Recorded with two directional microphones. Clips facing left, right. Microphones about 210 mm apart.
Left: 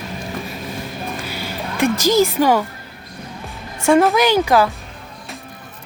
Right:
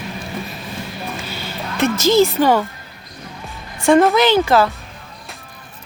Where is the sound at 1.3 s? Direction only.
10° left (ahead or behind).